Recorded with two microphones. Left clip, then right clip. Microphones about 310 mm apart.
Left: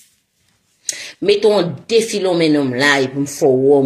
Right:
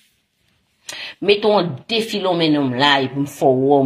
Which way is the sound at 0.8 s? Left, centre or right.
Centre.